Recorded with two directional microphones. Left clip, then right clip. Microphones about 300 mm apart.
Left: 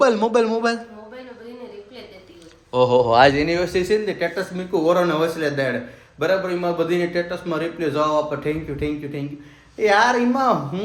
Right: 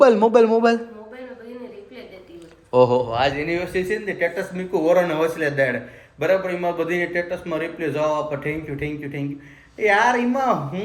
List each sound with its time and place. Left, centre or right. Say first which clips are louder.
0.0 s a man's voice: right 3 dB; centre
2.7 s a man's voice: right 1 dB; centre
3.1 s a man's voice: left 7 dB; left
3.4 s a man's voice: left 3 dB; centre